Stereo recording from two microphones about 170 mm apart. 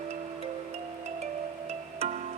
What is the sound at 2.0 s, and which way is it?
Music, 40° right (ahead or behind).